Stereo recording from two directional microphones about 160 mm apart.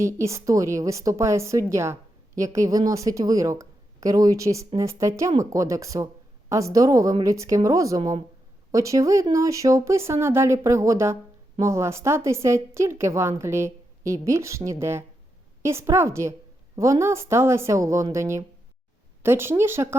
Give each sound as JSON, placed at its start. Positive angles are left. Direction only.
{"t": 0.0, "sound": "a woman's voice", "side_deg": -20}